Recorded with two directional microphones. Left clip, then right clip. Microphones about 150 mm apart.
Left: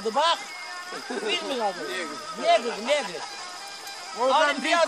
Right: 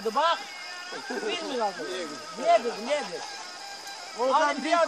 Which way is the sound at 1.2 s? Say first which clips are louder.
Left 3 dB; 35° left (ahead or behind).